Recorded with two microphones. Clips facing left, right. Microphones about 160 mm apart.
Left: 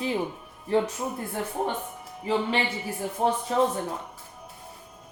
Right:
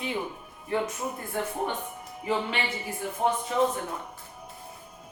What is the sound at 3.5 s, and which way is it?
Speech, 35° left (ahead or behind).